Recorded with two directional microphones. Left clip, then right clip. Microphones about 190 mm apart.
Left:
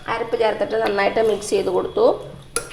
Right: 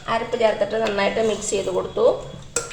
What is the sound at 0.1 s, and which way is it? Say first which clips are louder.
Speech: even; 45° left (ahead or behind).